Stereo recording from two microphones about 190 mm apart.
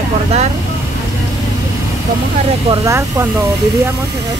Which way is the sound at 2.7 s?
15° right (ahead or behind).